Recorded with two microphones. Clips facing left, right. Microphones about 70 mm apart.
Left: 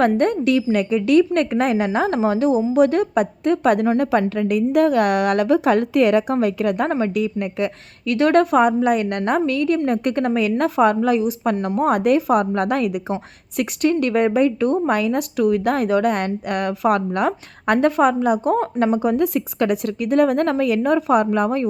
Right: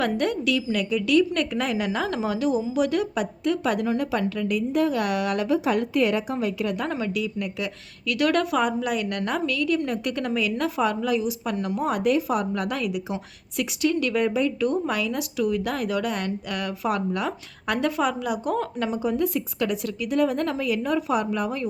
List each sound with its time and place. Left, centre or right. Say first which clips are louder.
0.0 s a woman's voice: left 7 dB; left